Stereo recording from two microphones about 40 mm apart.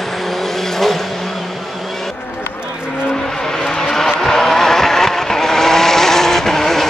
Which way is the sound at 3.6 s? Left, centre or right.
Centre.